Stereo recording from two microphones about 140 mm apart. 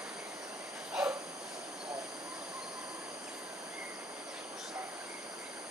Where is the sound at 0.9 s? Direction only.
10° right (ahead or behind).